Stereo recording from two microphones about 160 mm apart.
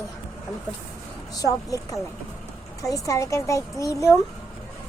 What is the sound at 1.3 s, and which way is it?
Speech, 20° left (ahead or behind).